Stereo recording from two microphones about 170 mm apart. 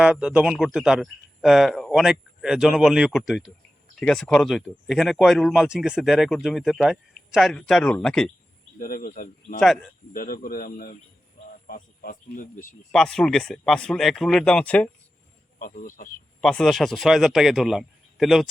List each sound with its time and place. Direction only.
0.0 s speech: 5° right (ahead or behind)
8.8 s speech: 55° left (ahead or behind)
12.9 s speech: 5° left (ahead or behind)
15.5 s speech: 55° left (ahead or behind)
16.4 s speech: 5° left (ahead or behind)